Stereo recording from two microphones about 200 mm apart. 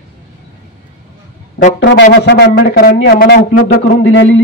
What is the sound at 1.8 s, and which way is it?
A man's voice, 65° left (ahead or behind).